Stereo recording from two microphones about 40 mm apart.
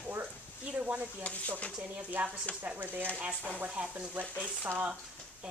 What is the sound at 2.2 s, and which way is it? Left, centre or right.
Speech, right.